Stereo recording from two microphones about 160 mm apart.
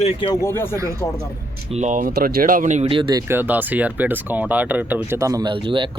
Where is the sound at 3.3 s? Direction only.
10° right (ahead or behind); by 5.8 s 30° right (ahead or behind).